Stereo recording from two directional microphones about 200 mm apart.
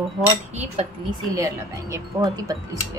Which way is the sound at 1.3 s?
15° right (ahead or behind).